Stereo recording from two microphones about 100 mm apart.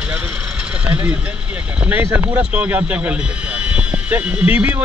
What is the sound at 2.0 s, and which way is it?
Speech, 25° right (ahead or behind).